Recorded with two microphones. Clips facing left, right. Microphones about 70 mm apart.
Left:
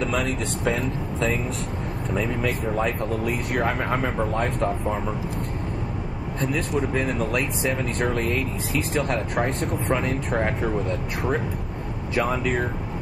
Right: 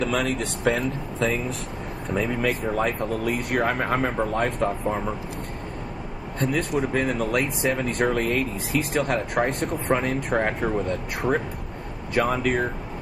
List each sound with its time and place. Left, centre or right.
0.0 s speech: right
2.0 s speech: centre
6.4 s speech: centre